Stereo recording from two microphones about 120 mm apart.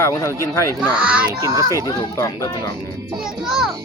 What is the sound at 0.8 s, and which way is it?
Speech, 10° right (ahead or behind).